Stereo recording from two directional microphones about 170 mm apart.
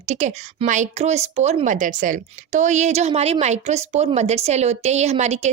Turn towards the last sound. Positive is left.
turn(degrees=-40)  # may be behind; listen again after turning